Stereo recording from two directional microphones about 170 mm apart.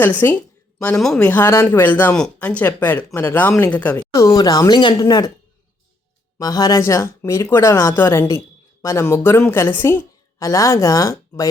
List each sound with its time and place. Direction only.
0.0 s speech: 10° left (ahead or behind)
4.1 s speech: 20° left (ahead or behind)
6.4 s speech: 20° left (ahead or behind)